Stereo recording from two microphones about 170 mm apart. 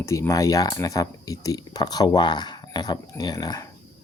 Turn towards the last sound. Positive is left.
turn(degrees=25)  # may be behind; listen again after turning